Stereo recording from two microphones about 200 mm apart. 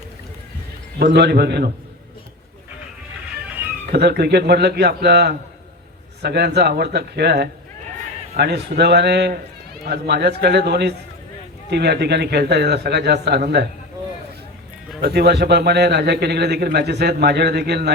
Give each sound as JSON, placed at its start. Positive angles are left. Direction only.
{"t": 0.9, "sound": "a man's voice", "side_deg": -55}
{"t": 3.9, "sound": "a man's voice", "side_deg": -50}
{"t": 15.0, "sound": "a man's voice", "side_deg": -55}